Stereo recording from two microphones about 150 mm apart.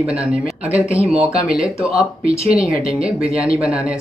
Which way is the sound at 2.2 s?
40° right (ahead or behind).